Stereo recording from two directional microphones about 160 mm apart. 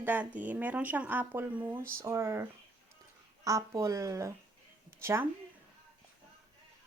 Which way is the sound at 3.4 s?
20° right (ahead or behind).